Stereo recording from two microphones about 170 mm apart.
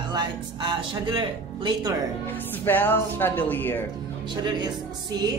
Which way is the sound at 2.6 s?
10° left (ahead or behind).